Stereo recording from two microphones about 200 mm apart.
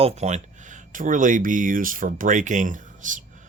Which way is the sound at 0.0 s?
35° right (ahead or behind).